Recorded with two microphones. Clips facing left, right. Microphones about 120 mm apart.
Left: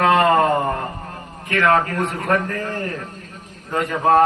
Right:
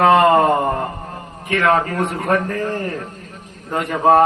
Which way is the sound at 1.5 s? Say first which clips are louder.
Right 1 dB; 25° right (ahead or behind).